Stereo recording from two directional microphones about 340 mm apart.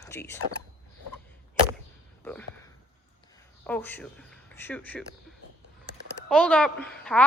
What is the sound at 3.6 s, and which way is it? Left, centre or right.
Speech, centre.